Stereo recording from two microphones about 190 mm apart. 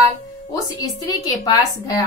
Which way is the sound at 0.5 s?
20° left (ahead or behind).